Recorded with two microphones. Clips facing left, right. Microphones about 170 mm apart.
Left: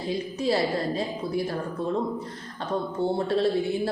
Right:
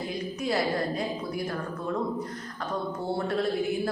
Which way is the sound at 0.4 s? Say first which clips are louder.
Left 3 dB; 30° left (ahead or behind).